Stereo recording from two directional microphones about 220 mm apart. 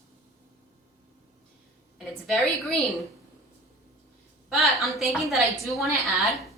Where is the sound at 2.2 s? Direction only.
Centre (ahead or behind).